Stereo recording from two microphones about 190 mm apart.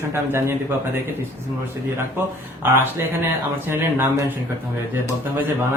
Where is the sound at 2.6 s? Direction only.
10° right (ahead or behind).